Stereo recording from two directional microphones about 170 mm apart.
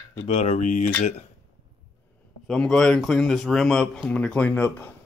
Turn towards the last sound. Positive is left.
turn(degrees=10)  # may be behind; listen again after turning